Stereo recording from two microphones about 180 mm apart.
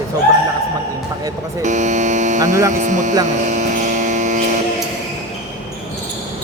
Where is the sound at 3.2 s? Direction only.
40° right (ahead or behind).